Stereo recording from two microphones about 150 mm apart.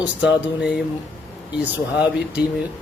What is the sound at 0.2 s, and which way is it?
Speech, 5° right (ahead or behind).